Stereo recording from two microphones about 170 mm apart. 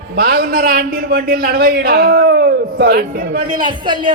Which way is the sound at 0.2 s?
65° right (ahead or behind).